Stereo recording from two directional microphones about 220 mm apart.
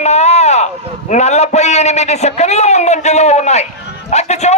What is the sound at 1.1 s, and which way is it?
A man's voice, 30° left (ahead or behind).